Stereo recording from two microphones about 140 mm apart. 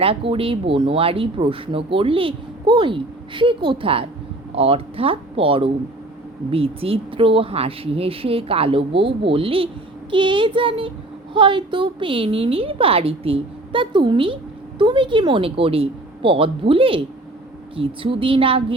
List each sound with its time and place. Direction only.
0.0 s speech: 40° right (ahead or behind)